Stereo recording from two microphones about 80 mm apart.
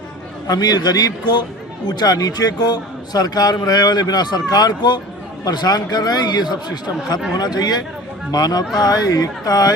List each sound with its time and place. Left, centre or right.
0.4 s a man's voice: left